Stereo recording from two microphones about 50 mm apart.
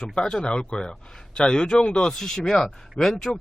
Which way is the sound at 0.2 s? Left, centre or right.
Centre.